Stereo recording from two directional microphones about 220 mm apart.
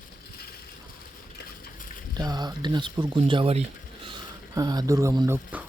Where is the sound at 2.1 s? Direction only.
20° right (ahead or behind).